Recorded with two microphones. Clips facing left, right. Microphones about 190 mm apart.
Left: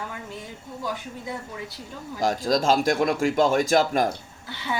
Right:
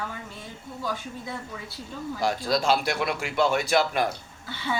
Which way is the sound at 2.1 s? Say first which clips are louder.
Left 3 dB; 45° left (ahead or behind).